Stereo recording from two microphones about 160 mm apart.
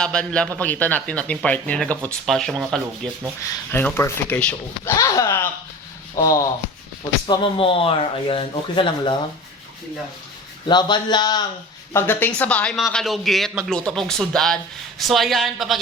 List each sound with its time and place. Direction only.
0.0 s speech: 5° left (ahead or behind)
3.7 s speech: 15° left (ahead or behind)
4.9 s a man's voice: 20° left (ahead or behind)
7.3 s speech: 35° left (ahead or behind)
10.7 s a man's voice: 30° left (ahead or behind)
11.9 s speech: 15° left (ahead or behind)